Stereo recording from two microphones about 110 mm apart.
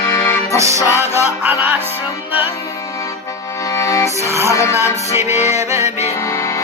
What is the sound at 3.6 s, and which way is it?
Music, 25° left (ahead or behind).